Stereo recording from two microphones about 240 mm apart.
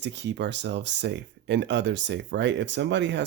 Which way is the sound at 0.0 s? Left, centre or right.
Right.